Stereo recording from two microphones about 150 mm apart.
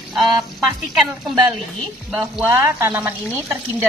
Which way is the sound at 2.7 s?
15° right (ahead or behind).